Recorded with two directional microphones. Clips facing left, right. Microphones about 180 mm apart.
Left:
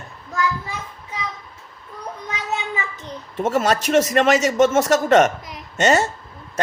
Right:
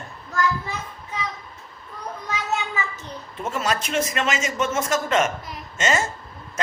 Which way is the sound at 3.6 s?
45° left (ahead or behind).